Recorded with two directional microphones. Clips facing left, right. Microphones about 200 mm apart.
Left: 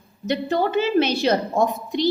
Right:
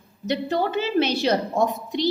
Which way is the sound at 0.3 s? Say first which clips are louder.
Left 2 dB; 55° left (ahead or behind).